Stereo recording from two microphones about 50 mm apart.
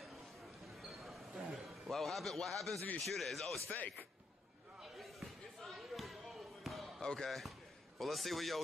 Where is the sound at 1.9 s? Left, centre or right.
Centre.